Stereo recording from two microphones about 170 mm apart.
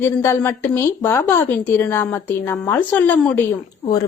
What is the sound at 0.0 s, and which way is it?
A woman's voice, 15° left (ahead or behind).